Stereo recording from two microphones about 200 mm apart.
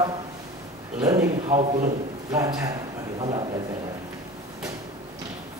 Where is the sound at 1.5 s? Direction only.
35° right (ahead or behind).